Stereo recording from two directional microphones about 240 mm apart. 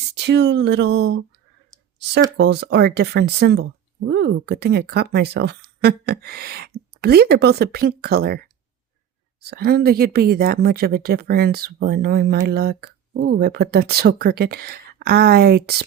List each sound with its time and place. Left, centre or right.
0.1 s speech: right
2.4 s speech: right
9.5 s speech: right